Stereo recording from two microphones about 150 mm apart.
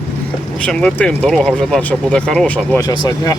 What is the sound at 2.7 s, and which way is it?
Speech, 30° left (ahead or behind).